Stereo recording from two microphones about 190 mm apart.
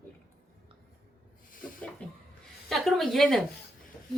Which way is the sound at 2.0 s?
5° left (ahead or behind).